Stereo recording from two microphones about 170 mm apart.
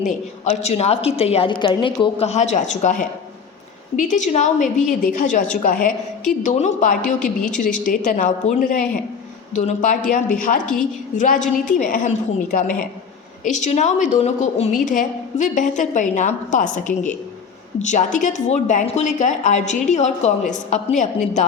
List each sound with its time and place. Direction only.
0.0 s a woman's voice: 40° left (ahead or behind)